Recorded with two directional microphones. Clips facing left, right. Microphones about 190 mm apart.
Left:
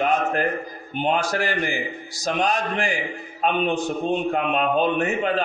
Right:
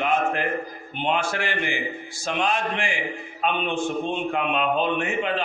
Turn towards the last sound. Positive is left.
turn(degrees=40)  # may be behind; listen again after turning